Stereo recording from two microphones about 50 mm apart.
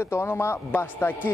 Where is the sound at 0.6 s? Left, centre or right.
Left.